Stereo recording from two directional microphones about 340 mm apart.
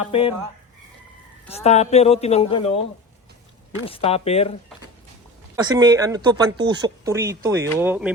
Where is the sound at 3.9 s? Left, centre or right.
Centre.